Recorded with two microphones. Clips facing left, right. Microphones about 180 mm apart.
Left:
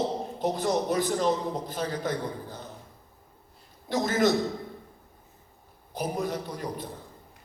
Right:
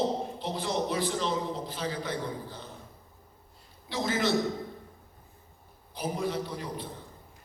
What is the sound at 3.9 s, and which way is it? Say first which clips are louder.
Speech: left 5 dB; 50° left (ahead or behind).